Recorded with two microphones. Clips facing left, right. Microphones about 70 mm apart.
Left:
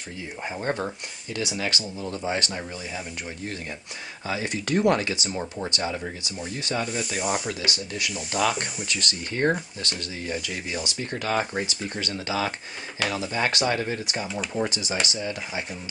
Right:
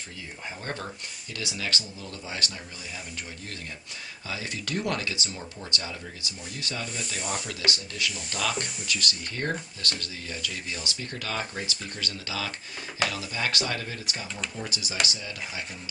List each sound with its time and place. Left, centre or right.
0.6 s speech: left
4.5 s speech: left
8.5 s speech: left
14.2 s speech: centre
14.5 s speech: left